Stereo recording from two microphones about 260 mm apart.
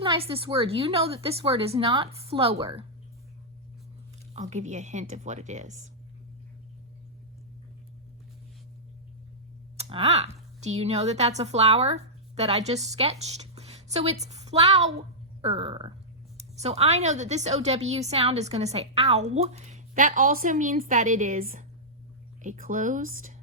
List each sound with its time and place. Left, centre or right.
0.0 s a woman's voice: centre
4.4 s a woman's voice: right
9.7 s a woman's voice: right